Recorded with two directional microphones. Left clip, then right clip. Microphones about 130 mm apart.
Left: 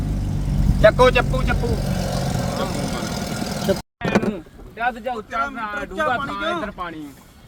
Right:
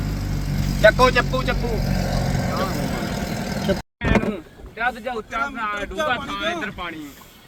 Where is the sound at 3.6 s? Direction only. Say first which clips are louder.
Left 2 dB; 45° left (ahead or behind).